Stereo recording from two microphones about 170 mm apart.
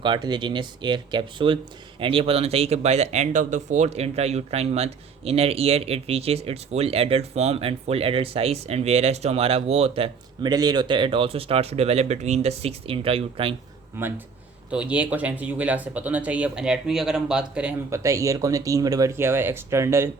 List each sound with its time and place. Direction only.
0.0 s speech: 25° right (ahead or behind)
14.7 s speech: 5° right (ahead or behind)
17.9 s speech: 20° right (ahead or behind)